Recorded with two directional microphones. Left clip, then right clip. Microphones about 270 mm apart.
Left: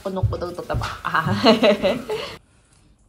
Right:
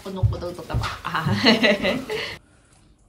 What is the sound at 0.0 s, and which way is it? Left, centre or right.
Speech, centre.